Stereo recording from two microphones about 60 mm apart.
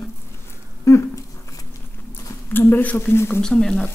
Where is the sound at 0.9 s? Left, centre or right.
Left.